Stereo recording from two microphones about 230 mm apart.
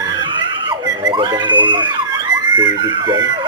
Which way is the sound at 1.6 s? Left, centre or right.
Right.